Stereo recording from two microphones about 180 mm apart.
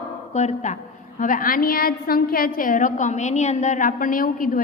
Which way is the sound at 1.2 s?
50° left (ahead or behind).